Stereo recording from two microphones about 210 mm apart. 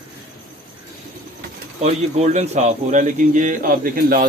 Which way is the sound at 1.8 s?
30° right (ahead or behind).